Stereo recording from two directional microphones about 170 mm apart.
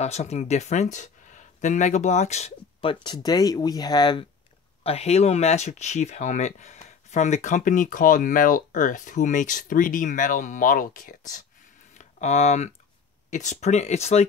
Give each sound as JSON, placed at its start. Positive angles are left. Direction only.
{"t": 0.0, "sound": "speech", "side_deg": 40}
{"t": 4.8, "sound": "speech", "side_deg": 40}